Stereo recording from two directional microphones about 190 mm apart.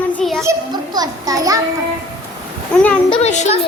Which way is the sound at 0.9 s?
20° right (ahead or behind).